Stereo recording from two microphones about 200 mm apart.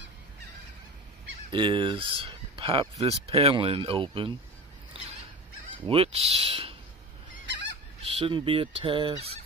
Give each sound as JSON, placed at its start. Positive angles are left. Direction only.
{"t": 1.5, "sound": "speech", "side_deg": -25}
{"t": 5.9, "sound": "speech", "side_deg": -30}
{"t": 8.0, "sound": "speech", "side_deg": -30}